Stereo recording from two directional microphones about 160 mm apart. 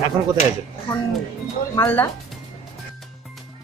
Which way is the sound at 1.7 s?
15° left (ahead or behind).